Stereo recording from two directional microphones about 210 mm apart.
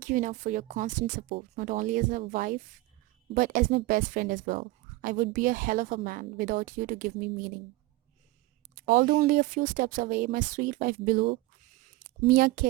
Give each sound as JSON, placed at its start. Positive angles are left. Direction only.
{"t": 0.0, "sound": "a woman's voice", "side_deg": -40}
{"t": 8.7, "sound": "speech", "side_deg": -40}